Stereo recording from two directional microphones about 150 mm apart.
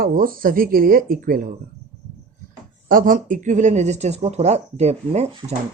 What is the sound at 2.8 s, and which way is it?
Speech, 70° right (ahead or behind).